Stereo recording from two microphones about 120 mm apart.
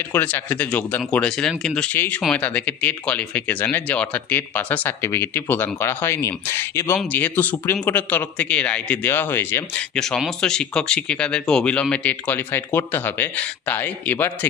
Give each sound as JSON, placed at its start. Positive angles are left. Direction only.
{"t": 0.1, "sound": "speech", "side_deg": 15}
{"t": 9.9, "sound": "speech", "side_deg": 5}